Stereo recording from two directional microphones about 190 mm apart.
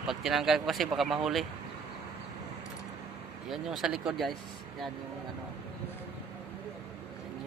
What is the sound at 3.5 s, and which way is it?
Speech, centre (ahead or behind).